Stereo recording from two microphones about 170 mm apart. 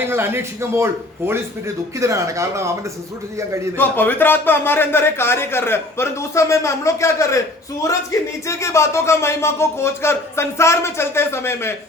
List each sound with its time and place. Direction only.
0.0 s speech: 15° right (ahead or behind)
3.8 s speech: 10° left (ahead or behind)